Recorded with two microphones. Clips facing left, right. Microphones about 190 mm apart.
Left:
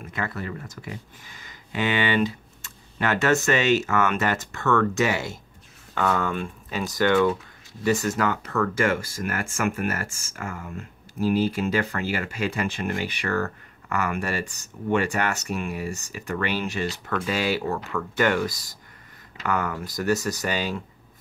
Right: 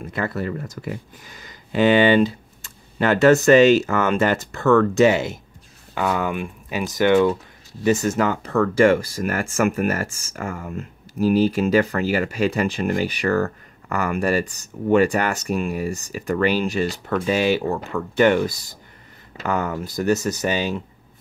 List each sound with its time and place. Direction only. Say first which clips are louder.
0.0 s speech: right 6 dB; 35° right (ahead or behind)
10.3 s speech: right 3 dB; 50° right (ahead or behind)
11.2 s speech: right 5 dB; 35° right (ahead or behind)
17.3 s speech: right 6 dB; 20° right (ahead or behind)